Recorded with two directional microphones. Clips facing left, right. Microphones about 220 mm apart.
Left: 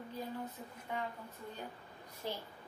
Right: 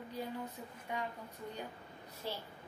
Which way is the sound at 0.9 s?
15° right (ahead or behind).